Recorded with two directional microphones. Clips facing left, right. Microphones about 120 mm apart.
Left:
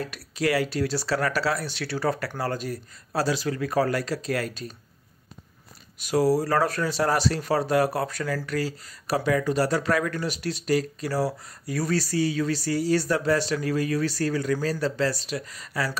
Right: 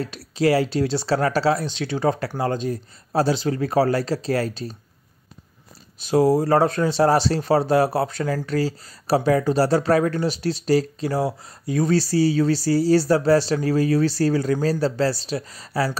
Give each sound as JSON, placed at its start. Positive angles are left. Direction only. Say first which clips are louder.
{"t": 0.0, "sound": "speech", "louder": "right 6 dB", "side_deg": -30}
{"t": 5.9, "sound": "speech", "louder": "right 4 dB", "side_deg": -25}